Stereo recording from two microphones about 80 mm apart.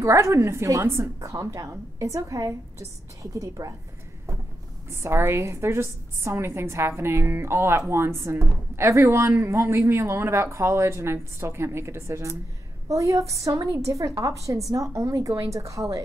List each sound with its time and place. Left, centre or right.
0.0 s speech: right
4.8 s a woman's voice: right